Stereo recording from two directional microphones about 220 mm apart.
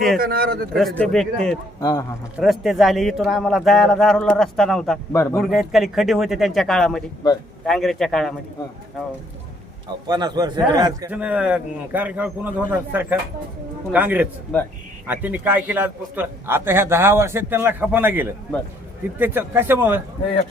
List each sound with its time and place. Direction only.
0.2 s a man's voice: 45° right (ahead or behind)
0.8 s speech: centre (ahead or behind)
1.8 s speech: 15° left (ahead or behind)
2.4 s speech: centre (ahead or behind)
5.4 s speech: centre (ahead or behind)
10.1 s a man's voice: 15° right (ahead or behind)
11.1 s a man's voice: 5° right (ahead or behind)
14.5 s speech: 5° left (ahead or behind)
15.0 s a man's voice: 10° right (ahead or behind)